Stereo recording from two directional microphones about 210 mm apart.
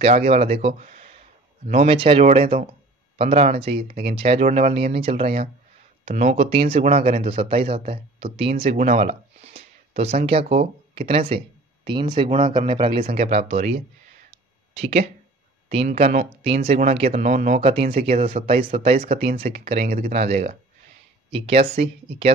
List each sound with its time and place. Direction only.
0.0 s speech: 30° right (ahead or behind)
7.0 s speech: 45° right (ahead or behind)
7.2 s speech: 25° right (ahead or behind)
13.0 s speech: 35° right (ahead or behind)
16.0 s speech: 45° right (ahead or behind)
16.4 s speech: 30° right (ahead or behind)
17.6 s speech: 25° right (ahead or behind)